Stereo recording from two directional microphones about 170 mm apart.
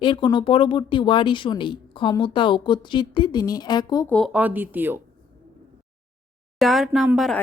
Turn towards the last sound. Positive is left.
turn(degrees=0)  # may be behind; listen again after turning